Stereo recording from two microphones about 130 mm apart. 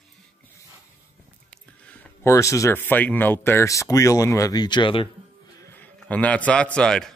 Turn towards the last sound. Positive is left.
turn(degrees=5)  # may be behind; listen again after turning